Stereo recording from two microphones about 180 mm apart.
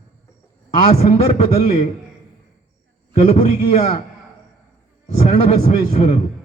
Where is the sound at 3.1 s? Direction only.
40° left (ahead or behind).